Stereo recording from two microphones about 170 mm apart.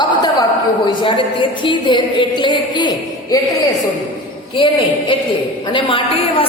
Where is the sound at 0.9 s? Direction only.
30° left (ahead or behind).